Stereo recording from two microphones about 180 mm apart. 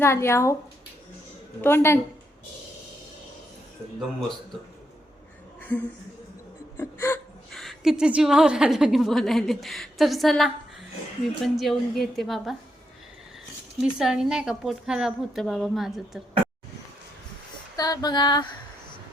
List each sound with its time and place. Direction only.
0.0 s speech: 15° left (ahead or behind)
1.6 s speech: 10° left (ahead or behind)
5.5 s a sound: 10° left (ahead or behind)
6.7 s hiccup: 15° left (ahead or behind)
7.5 s a woman's voice: centre (ahead or behind)
13.8 s a woman's voice: 5° right (ahead or behind)
17.7 s a sound: 20° left (ahead or behind)